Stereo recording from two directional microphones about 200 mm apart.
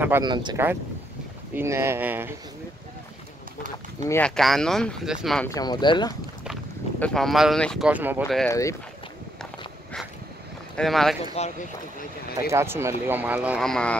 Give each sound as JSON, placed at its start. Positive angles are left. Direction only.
{"t": 0.2, "sound": "speech", "side_deg": -20}
{"t": 4.0, "sound": "speech", "side_deg": 15}
{"t": 4.4, "sound": "speech", "side_deg": 0}
{"t": 5.5, "sound": "speech", "side_deg": 20}
{"t": 6.4, "sound": "speech", "side_deg": 0}
{"t": 7.9, "sound": "speech", "side_deg": -10}
{"t": 8.5, "sound": "speech", "side_deg": 15}
{"t": 10.8, "sound": "speech", "side_deg": 0}
{"t": 11.4, "sound": "speech", "side_deg": 30}
{"t": 12.4, "sound": "speech", "side_deg": -15}